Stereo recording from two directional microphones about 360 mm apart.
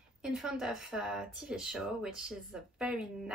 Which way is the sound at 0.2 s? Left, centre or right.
Centre.